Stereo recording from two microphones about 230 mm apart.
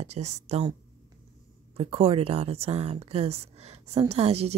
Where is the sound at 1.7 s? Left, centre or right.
Right.